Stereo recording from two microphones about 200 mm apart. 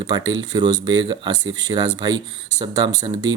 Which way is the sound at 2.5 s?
20° right (ahead or behind).